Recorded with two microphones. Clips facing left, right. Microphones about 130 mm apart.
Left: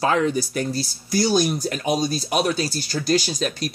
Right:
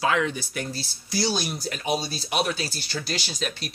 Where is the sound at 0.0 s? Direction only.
40° left (ahead or behind).